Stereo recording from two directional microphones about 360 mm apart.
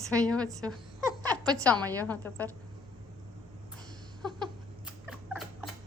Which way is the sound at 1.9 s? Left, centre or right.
Centre.